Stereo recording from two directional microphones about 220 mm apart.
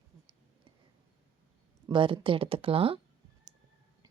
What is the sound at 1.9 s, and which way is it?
A woman's voice, 25° right (ahead or behind).